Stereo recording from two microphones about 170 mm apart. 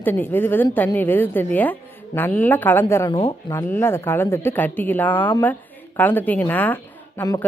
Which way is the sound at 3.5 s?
15° left (ahead or behind).